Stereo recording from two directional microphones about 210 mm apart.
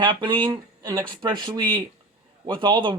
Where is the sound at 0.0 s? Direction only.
20° right (ahead or behind).